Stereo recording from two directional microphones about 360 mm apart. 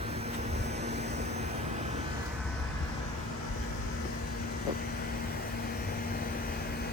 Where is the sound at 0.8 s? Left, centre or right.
Centre.